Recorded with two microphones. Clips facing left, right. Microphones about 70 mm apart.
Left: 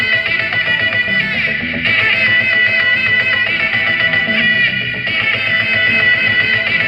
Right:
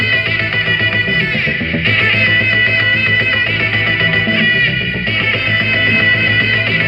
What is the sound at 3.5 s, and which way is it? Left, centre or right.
Music, left.